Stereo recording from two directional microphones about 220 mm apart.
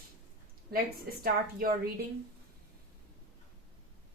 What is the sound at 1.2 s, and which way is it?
Speech, 45° right (ahead or behind).